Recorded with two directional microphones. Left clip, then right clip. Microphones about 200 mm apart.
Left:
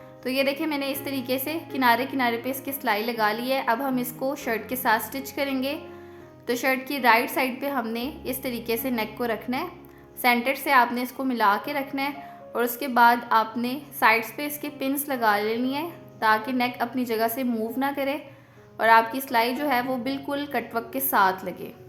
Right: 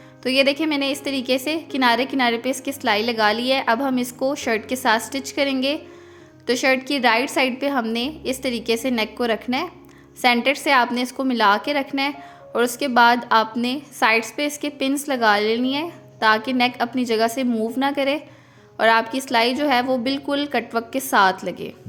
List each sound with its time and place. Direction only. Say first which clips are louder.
0.2 s a woman's voice: right 7 dB; 25° right (ahead or behind)